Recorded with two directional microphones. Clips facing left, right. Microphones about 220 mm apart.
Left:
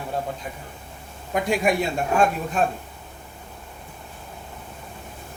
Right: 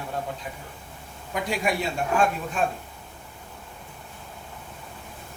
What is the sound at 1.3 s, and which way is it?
Speech, 50° left (ahead or behind).